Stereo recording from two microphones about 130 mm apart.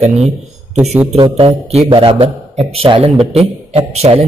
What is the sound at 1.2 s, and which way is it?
A man's voice, 45° right (ahead or behind).